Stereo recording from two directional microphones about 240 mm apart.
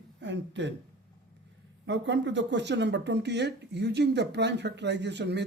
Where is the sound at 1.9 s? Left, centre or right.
Right.